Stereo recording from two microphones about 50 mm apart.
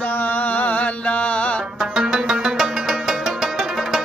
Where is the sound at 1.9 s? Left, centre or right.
Centre.